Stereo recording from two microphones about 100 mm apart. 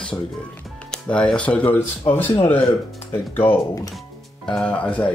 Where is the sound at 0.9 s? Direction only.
10° left (ahead or behind).